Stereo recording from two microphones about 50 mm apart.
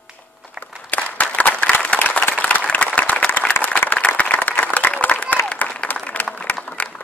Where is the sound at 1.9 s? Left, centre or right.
Left.